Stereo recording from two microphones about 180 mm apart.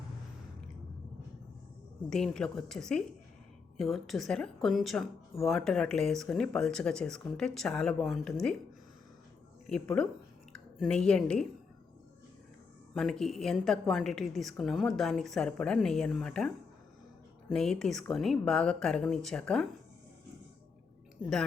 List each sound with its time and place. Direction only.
2.0 s a woman's voice: 5° left (ahead or behind)
9.6 s a woman's voice: 5° left (ahead or behind)
12.9 s a woman's voice: centre (ahead or behind)
17.5 s a woman's voice: 5° left (ahead or behind)
21.2 s a woman's voice: 5° left (ahead or behind)